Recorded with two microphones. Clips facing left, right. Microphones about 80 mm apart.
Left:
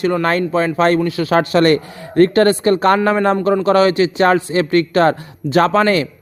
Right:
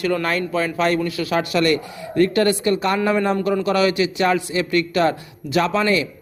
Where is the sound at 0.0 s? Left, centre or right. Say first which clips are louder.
Left 5 dB; left.